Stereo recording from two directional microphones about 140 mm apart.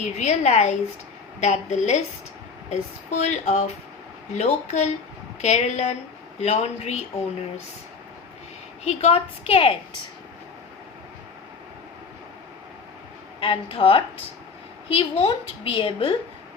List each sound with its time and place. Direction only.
0.0 s a woman's voice: 55° left (ahead or behind)
8.8 s a woman's voice: 50° left (ahead or behind)
13.4 s a woman's voice: 40° left (ahead or behind)